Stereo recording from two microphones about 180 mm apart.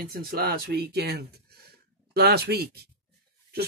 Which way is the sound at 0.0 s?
55° right (ahead or behind).